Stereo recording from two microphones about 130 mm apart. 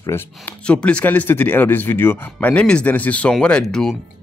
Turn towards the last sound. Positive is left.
turn(degrees=5)  # may be behind; listen again after turning